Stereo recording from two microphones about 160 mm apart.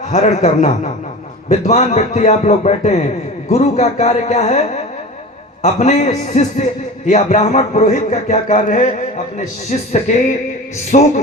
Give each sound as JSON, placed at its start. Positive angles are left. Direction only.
{"t": 0.1, "sound": "a man's voice", "side_deg": 45}